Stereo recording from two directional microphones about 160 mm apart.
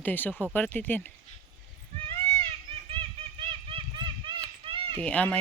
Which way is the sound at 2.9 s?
35° right (ahead or behind).